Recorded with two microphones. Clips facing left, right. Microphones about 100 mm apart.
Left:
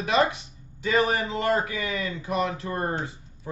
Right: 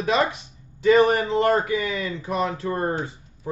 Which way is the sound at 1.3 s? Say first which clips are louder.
Right 5 dB; 40° right (ahead or behind).